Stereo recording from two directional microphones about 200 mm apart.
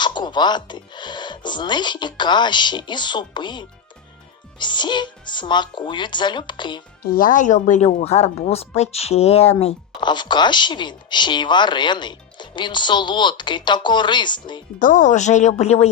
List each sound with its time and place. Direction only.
0.0 s speech: 20° left (ahead or behind)
7.0 s speech: 45° left (ahead or behind); by 14.6 s 20° left (ahead or behind)
14.8 s a woman's voice: 40° left (ahead or behind)